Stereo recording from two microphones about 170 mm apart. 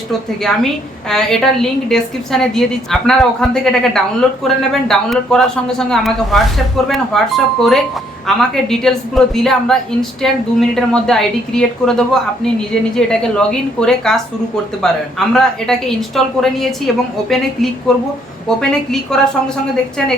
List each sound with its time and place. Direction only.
0.4 s a woman's voice: 5° left (ahead or behind)